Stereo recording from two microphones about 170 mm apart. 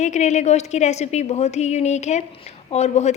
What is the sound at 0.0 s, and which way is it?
A woman's voice, 45° left (ahead or behind).